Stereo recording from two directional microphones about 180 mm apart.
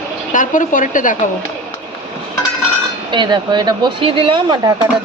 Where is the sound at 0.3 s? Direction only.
45° left (ahead or behind).